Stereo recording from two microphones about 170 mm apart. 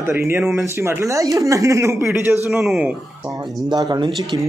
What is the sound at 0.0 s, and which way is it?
Speech, 15° right (ahead or behind).